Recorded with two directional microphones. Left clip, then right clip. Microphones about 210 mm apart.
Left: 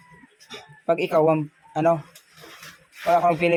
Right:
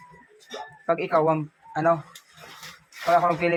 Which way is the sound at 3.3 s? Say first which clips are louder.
Left 3 dB; 40° left (ahead or behind).